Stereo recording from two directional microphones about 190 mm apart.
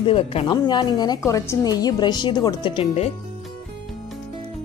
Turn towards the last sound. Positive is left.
turn(degrees=30)  # may be behind; listen again after turning